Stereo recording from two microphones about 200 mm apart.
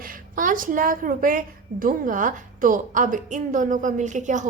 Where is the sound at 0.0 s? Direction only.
45° right (ahead or behind).